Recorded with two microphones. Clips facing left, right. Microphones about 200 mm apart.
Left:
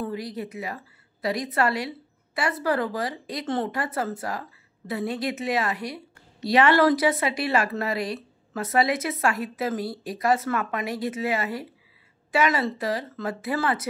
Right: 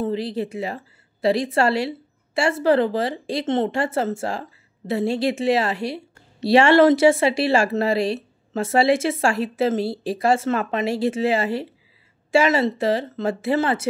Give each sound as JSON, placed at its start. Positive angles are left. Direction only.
{"t": 0.0, "sound": "a woman's voice", "side_deg": -30}